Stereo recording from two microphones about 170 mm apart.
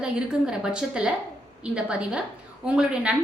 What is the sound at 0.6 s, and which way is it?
A woman's voice, 5° right (ahead or behind).